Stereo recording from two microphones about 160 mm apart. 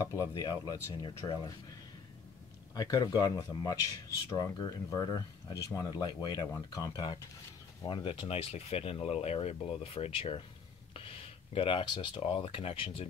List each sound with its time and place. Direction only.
0.3 s speech: 25° left (ahead or behind)
2.7 s speech: 25° left (ahead or behind)